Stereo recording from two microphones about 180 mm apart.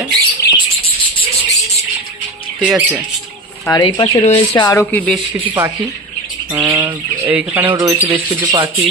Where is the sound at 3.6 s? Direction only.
25° left (ahead or behind).